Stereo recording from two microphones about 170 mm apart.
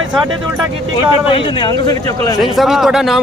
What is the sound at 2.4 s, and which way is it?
Speech, centre (ahead or behind).